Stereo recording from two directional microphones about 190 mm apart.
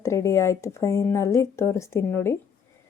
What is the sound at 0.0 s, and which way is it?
A woman's voice, 15° left (ahead or behind).